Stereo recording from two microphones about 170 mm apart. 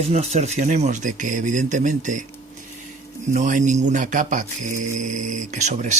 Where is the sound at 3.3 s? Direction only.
45° right (ahead or behind).